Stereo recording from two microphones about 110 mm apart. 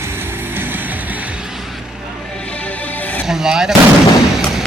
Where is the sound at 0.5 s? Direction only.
20° right (ahead or behind).